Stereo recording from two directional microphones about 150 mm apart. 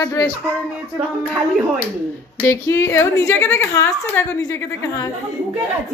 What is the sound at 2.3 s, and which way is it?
A woman's voice, 20° left (ahead or behind).